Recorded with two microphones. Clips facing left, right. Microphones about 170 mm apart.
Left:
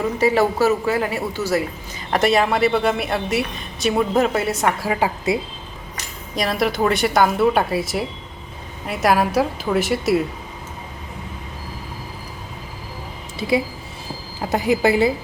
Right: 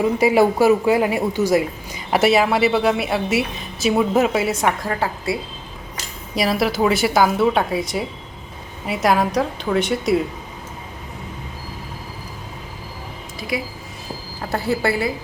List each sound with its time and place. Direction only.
0.2 s a woman's voice: 15° right (ahead or behind); by 5.4 s 15° left (ahead or behind)
6.3 s a woman's voice: 5° right (ahead or behind)
14.5 s a woman's voice: 15° left (ahead or behind)